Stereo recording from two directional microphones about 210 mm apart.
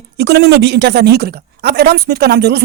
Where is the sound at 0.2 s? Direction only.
55° right (ahead or behind).